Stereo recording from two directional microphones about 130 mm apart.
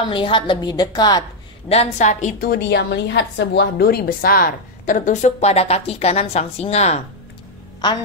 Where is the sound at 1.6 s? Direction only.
60° left (ahead or behind).